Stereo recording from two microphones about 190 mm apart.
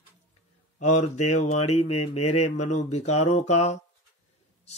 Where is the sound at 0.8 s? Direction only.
35° left (ahead or behind).